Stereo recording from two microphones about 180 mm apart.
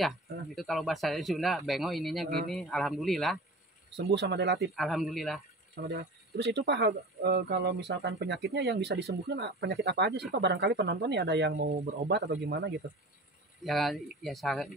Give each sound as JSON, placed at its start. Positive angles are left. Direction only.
{"t": 0.6, "sound": "speech", "side_deg": 0}
{"t": 3.9, "sound": "speech", "side_deg": -70}
{"t": 4.7, "sound": "speech", "side_deg": 0}
{"t": 5.9, "sound": "speech", "side_deg": -65}
{"t": 13.7, "sound": "speech", "side_deg": 0}